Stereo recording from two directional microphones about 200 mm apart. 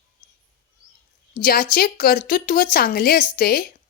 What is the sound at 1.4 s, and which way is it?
A woman's voice, 45° left (ahead or behind).